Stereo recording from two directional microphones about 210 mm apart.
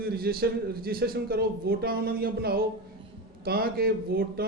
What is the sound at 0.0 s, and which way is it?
A man's voice, 45° right (ahead or behind).